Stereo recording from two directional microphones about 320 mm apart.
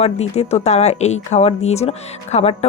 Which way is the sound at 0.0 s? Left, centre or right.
Centre.